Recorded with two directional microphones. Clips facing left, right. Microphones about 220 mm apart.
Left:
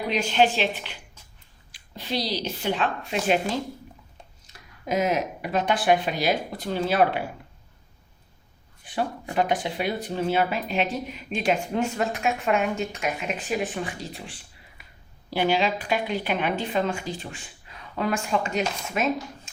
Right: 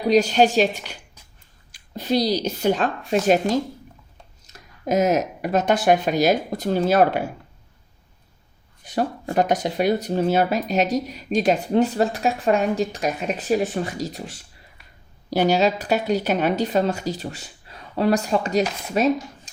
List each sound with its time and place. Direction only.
0.1 s a woman's voice: 40° right (ahead or behind)
8.8 s speech: 40° right (ahead or behind)